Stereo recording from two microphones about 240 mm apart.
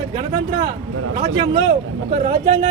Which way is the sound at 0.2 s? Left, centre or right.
Right.